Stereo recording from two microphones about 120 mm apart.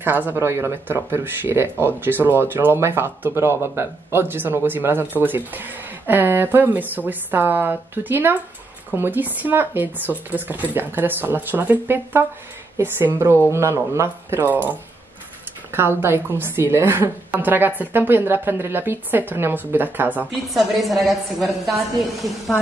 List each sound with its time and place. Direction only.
0.0 s speech: 15° right (ahead or behind)
15.7 s speech: 20° right (ahead or behind)
20.4 s a woman's voice: centre (ahead or behind)